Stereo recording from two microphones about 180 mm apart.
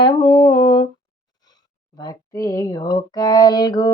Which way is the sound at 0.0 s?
25° left (ahead or behind).